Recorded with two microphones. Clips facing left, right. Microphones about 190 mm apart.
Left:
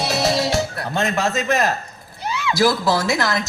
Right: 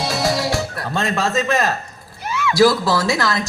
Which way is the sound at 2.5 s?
20° left (ahead or behind).